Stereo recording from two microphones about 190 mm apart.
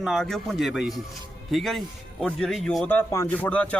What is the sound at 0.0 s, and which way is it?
Speech, centre (ahead or behind).